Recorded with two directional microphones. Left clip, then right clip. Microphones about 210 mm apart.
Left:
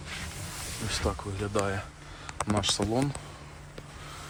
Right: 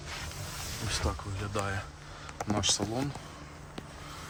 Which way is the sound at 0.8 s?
15° right (ahead or behind).